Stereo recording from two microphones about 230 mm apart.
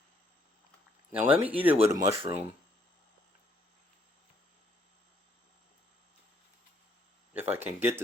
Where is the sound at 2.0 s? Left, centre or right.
Right.